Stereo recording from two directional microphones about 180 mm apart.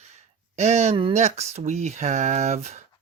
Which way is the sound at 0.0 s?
40° right (ahead or behind).